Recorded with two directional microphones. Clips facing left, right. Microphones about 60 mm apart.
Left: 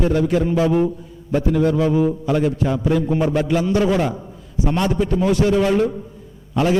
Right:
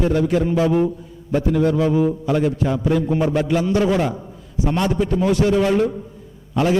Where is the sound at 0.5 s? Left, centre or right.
Centre.